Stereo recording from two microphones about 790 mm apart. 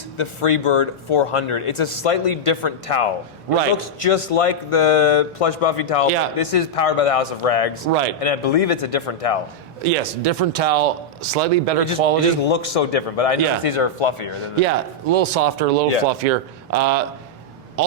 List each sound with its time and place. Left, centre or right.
0.2 s speech: left
7.9 s speech: right
8.2 s speech: left
9.8 s speech: right
12.4 s speech: left
14.6 s speech: right